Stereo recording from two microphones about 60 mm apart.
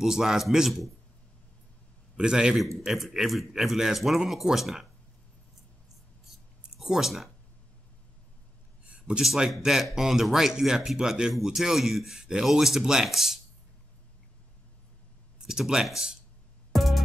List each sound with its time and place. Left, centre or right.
0.0 s speech: centre
2.1 s speech: centre
6.8 s speech: centre
8.8 s a sound: centre
9.2 s speech: centre
15.4 s speech: centre
16.7 s music: centre